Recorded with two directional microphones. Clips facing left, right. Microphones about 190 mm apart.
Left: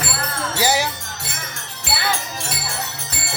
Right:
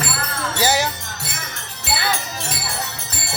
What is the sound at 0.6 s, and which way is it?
Speech, 10° left (ahead or behind).